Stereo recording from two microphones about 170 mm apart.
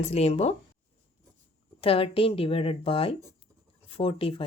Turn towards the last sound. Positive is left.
turn(degrees=30)  # may be behind; listen again after turning